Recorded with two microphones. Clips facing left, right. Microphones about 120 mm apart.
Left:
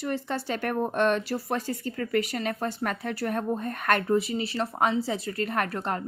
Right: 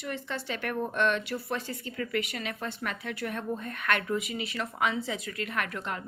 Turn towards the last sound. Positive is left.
turn(degrees=40)  # may be behind; listen again after turning